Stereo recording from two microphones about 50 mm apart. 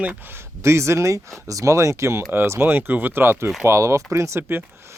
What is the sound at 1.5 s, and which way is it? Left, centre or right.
Speech, right.